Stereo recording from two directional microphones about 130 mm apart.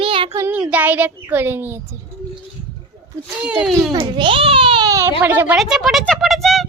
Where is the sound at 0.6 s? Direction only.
10° right (ahead or behind).